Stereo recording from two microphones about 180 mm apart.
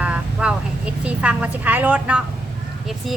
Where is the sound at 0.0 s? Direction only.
5° right (ahead or behind).